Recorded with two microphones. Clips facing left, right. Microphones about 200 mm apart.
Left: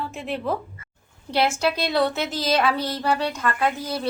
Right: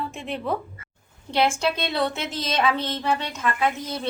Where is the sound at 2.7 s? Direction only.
35° left (ahead or behind).